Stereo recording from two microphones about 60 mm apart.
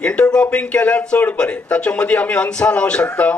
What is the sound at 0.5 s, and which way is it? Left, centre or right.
A man's voice, centre.